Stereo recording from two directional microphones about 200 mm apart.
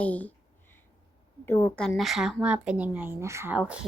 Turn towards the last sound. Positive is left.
turn(degrees=-10)  # may be behind; listen again after turning